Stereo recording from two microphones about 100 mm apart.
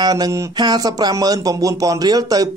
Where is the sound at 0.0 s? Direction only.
40° right (ahead or behind).